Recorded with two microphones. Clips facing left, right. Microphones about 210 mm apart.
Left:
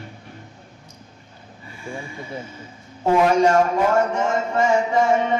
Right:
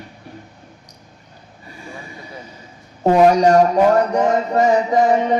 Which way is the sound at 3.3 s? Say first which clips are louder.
Right 4 dB; 40° right (ahead or behind).